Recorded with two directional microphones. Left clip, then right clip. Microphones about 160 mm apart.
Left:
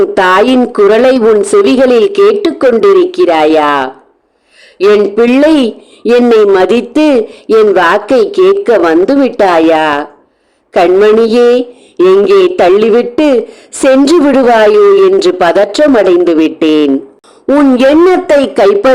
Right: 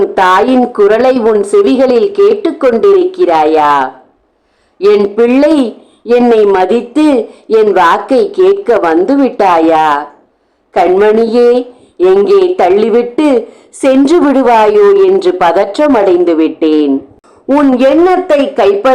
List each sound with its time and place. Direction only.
0.0 s speech: 45° left (ahead or behind)
17.5 s speech: 45° left (ahead or behind)